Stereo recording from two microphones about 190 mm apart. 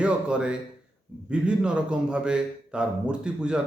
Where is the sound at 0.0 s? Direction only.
5° right (ahead or behind).